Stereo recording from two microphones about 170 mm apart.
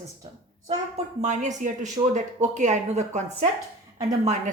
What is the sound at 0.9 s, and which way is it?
A woman's voice, 40° right (ahead or behind).